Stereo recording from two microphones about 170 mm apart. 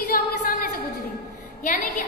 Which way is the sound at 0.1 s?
55° left (ahead or behind).